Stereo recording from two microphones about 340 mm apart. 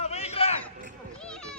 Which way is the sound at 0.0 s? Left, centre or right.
Centre.